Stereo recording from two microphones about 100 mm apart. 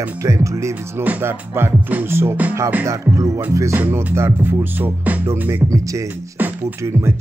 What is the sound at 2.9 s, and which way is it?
Speech, 35° right (ahead or behind).